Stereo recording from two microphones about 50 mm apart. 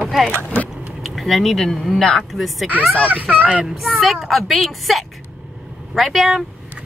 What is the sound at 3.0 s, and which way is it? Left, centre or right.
Speech, right.